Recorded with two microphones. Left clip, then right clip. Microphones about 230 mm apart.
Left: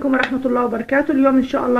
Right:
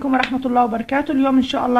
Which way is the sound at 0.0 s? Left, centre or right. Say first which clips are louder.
Left 1 dB; right.